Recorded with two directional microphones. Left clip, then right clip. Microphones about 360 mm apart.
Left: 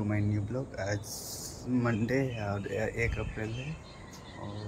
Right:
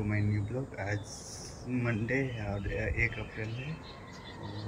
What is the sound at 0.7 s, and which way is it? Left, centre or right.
Speech, centre.